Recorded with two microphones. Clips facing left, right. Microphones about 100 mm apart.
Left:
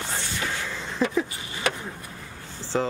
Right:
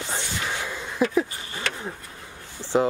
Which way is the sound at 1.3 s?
20° left (ahead or behind).